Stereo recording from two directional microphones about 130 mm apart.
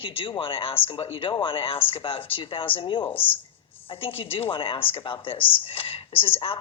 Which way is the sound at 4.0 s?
45° left (ahead or behind).